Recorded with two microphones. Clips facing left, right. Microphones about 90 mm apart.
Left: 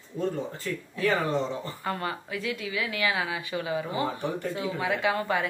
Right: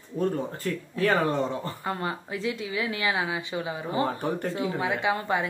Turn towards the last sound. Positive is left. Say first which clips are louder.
# even
turn(degrees=-20)  # may be behind; listen again after turning